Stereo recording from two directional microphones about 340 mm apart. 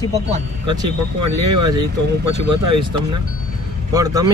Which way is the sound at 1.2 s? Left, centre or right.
Right.